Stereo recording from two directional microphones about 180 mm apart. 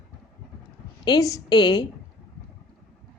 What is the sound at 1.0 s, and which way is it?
Speech, 20° left (ahead or behind).